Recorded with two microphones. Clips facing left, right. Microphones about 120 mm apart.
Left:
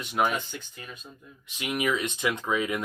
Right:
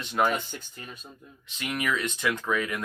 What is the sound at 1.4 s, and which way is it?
Speech, 15° left (ahead or behind).